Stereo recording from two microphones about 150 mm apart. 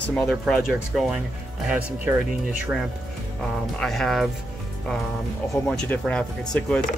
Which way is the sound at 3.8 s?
Centre (ahead or behind).